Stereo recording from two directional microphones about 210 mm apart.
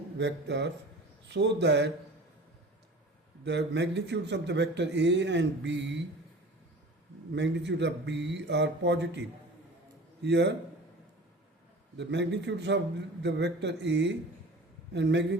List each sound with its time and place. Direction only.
0.2 s a man's voice: 55° right (ahead or behind)
3.4 s a man's voice: 55° right (ahead or behind)
7.3 s a man's voice: 55° right (ahead or behind)
10.2 s a man's voice: 55° right (ahead or behind)
11.9 s a man's voice: 55° right (ahead or behind)